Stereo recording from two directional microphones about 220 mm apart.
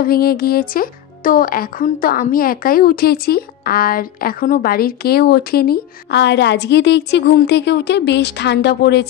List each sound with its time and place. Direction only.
0.0 s speech: 45° left (ahead or behind)